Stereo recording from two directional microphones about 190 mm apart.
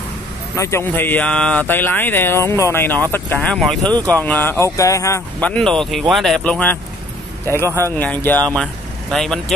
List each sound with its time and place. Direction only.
0.6 s speech: 15° left (ahead or behind)
7.6 s speech: 15° right (ahead or behind)
8.0 s speech: 10° left (ahead or behind)